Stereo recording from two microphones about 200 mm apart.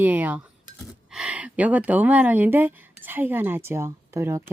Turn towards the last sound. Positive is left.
turn(degrees=-15)  # may be behind; listen again after turning